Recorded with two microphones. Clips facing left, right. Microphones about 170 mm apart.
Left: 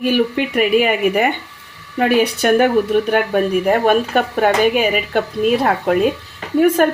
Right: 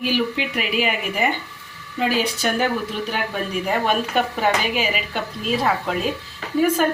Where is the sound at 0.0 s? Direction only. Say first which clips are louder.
Left 6 dB; 50° left (ahead or behind).